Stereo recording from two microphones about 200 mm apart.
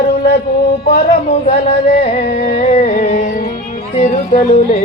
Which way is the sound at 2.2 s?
50° left (ahead or behind).